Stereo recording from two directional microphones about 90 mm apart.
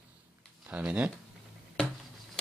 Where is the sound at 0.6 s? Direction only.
15° right (ahead or behind).